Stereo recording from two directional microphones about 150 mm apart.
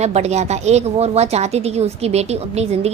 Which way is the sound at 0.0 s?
45° right (ahead or behind).